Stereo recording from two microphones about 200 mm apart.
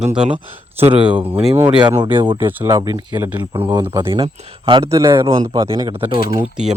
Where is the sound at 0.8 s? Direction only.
25° right (ahead or behind).